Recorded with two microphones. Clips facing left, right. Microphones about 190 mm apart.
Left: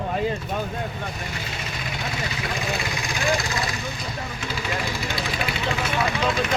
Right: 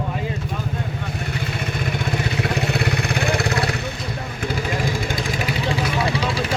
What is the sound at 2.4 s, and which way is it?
Vehicle, 65° right (ahead or behind).